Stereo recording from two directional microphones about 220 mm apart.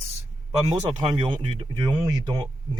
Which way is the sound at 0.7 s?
15° right (ahead or behind).